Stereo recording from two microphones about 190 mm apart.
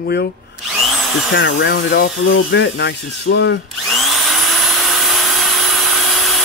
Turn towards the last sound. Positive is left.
turn(degrees=0)  # may be behind; listen again after turning